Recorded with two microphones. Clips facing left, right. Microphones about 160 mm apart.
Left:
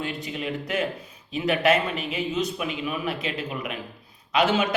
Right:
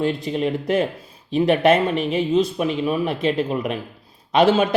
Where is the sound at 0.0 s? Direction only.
40° right (ahead or behind).